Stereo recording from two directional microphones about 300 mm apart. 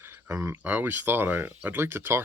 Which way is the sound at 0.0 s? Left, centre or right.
Centre.